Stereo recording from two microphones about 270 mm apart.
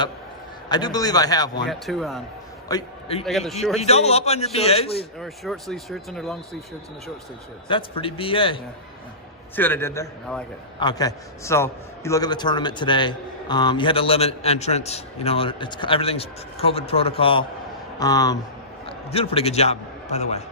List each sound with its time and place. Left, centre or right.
0.7 s speech: centre
1.6 s speech: centre
2.6 s a man's voice: centre
3.2 s speech: centre
3.8 s a man's voice: left
5.2 s speech: centre
7.7 s a man's voice: centre
9.6 s a man's voice: centre; by 19.7 s left